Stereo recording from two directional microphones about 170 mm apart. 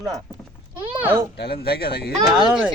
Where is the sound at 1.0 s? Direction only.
15° right (ahead or behind).